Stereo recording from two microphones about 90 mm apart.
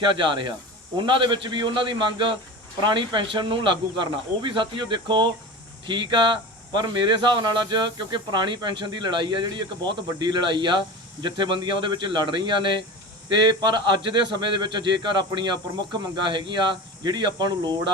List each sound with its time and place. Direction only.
0.1 s speech: 65° right (ahead or behind)